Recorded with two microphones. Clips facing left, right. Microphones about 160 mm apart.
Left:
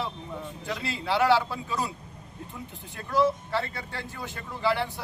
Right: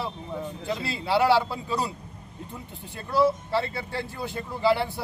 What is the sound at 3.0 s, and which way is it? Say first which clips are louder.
Speech: right 2 dB; 10° right (ahead or behind).